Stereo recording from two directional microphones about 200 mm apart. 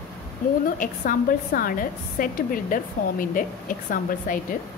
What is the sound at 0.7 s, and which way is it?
A woman's voice, 45° left (ahead or behind).